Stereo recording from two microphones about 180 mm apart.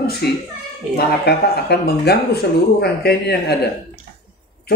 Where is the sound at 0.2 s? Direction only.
65° left (ahead or behind).